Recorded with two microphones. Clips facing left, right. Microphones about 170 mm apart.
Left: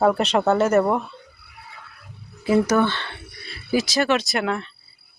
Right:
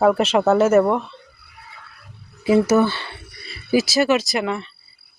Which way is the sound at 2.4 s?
10° right (ahead or behind).